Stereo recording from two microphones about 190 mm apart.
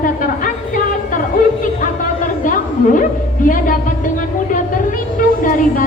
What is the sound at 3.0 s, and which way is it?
Speech, 45° left (ahead or behind).